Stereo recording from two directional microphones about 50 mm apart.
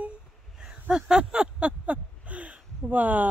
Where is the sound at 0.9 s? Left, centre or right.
Centre; by 3.3 s right.